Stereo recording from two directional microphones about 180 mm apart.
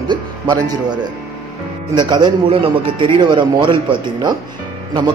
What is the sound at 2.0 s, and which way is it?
A man's voice, 25° right (ahead or behind).